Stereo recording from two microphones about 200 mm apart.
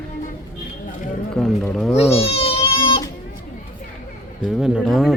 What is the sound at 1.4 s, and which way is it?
Speech, 5° left (ahead or behind).